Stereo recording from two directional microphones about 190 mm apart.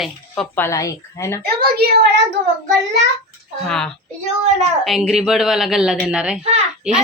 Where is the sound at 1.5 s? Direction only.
55° right (ahead or behind).